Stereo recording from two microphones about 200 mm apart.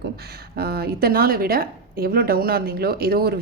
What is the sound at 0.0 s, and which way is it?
Speech, 50° right (ahead or behind).